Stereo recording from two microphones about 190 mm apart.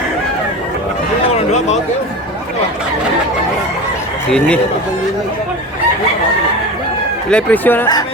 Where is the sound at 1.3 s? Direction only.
35° left (ahead or behind).